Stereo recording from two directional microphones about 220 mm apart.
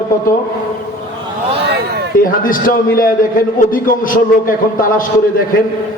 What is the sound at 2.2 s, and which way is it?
A man's voice, 40° left (ahead or behind).